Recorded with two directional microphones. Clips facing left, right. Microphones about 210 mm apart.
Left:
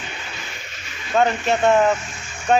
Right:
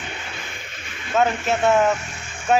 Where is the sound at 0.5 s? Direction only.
50° right (ahead or behind).